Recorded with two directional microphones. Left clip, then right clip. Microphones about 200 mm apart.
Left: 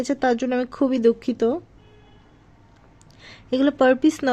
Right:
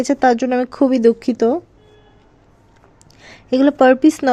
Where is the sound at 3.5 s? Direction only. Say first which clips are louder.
Right 6 dB; 10° right (ahead or behind).